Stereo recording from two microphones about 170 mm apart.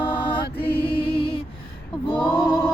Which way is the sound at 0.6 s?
10° left (ahead or behind).